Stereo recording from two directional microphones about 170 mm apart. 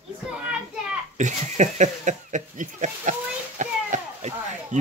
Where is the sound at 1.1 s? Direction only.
45° right (ahead or behind).